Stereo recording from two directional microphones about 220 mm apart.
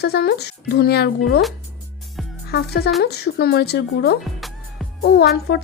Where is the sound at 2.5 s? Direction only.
45° left (ahead or behind).